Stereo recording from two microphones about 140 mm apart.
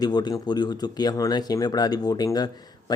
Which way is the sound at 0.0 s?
30° left (ahead or behind).